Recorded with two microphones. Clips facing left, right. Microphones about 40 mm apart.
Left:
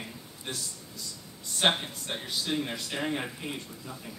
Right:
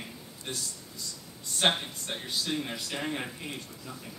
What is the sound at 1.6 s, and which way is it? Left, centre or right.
Speech, centre.